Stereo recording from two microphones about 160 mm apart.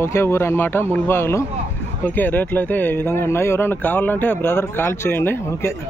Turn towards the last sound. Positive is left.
turn(degrees=15)  # may be behind; listen again after turning